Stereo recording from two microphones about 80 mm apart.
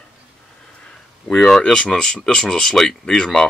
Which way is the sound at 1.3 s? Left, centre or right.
Centre.